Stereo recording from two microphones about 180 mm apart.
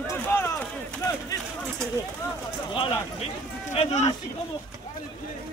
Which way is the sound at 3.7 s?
35° left (ahead or behind).